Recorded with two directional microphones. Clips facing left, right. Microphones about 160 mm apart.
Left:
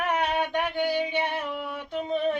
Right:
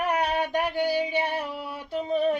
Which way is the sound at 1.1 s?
40° right (ahead or behind).